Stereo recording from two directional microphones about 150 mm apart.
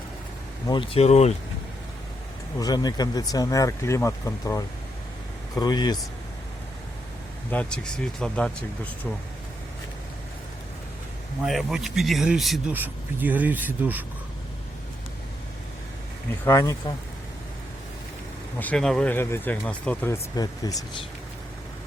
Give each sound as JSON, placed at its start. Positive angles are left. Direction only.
{"t": 0.7, "sound": "speech", "side_deg": 35}
{"t": 1.0, "sound": "speech", "side_deg": 45}
{"t": 2.6, "sound": "speech", "side_deg": 25}
{"t": 7.5, "sound": "speech", "side_deg": 5}
{"t": 11.4, "sound": "speech", "side_deg": 0}
{"t": 16.4, "sound": "speech", "side_deg": 20}
{"t": 18.6, "sound": "speech", "side_deg": 5}
{"t": 20.3, "sound": "speech", "side_deg": 25}